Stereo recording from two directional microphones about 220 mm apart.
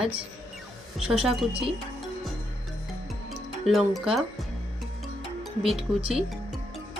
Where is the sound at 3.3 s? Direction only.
Centre (ahead or behind).